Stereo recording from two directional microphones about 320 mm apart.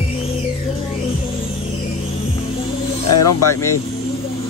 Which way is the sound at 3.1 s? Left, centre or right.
Left.